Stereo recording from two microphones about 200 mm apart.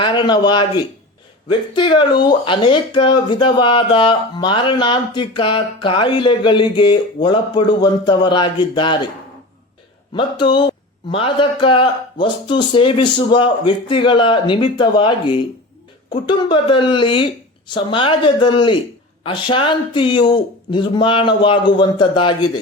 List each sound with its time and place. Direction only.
0.0 s speech: 25° left (ahead or behind)
10.2 s speech: 25° left (ahead or behind)